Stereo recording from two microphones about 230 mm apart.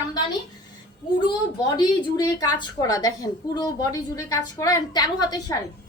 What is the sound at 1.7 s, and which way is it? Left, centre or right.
A woman's voice, centre.